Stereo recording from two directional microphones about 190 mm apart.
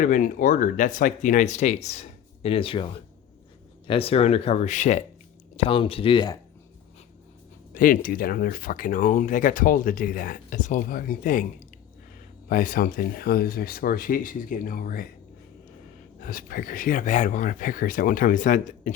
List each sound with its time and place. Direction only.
0.0 s speech: 45° left (ahead or behind)
5.5 s speech: 30° left (ahead or behind)
7.7 s speech: 45° left (ahead or behind)
12.5 s speech: 50° left (ahead or behind)
16.2 s speech: 50° left (ahead or behind)